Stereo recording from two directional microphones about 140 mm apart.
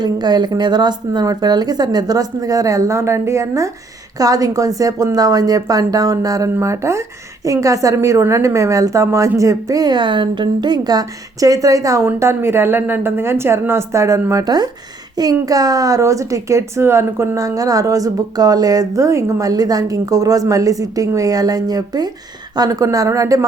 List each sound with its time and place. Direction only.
0.0 s a woman's voice: 30° right (ahead or behind)